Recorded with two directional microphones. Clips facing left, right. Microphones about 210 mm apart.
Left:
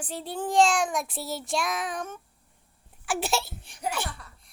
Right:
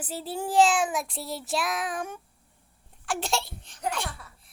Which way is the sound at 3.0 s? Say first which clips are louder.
Left 1 dB; 5° left (ahead or behind).